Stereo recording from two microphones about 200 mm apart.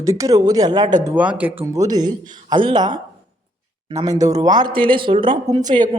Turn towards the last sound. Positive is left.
turn(degrees=-20)  # may be behind; listen again after turning